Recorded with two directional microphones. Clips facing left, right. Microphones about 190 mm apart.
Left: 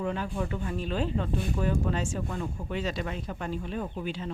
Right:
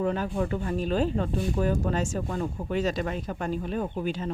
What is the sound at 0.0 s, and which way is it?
Speech, 45° right (ahead or behind).